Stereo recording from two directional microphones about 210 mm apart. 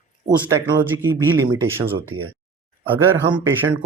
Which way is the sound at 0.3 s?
15° right (ahead or behind).